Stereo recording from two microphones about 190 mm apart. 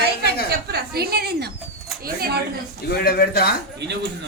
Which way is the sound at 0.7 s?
55° right (ahead or behind).